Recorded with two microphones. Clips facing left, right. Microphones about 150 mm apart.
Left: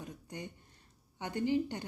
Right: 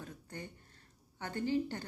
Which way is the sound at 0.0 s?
15° left (ahead or behind).